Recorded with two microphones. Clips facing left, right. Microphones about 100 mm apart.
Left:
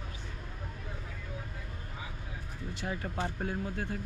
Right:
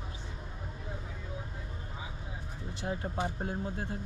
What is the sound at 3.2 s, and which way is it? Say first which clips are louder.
Speech: even; 25° right (ahead or behind).